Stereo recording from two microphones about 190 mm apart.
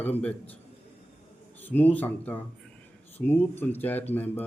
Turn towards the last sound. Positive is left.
turn(degrees=10)  # may be behind; listen again after turning